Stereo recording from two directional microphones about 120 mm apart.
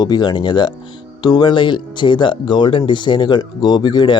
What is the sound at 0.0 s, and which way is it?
Speech, 35° left (ahead or behind).